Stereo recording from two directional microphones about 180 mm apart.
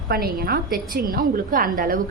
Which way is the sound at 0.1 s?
55° right (ahead or behind).